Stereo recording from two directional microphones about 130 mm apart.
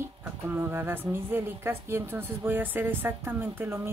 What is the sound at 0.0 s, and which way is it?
A woman's voice, 15° right (ahead or behind).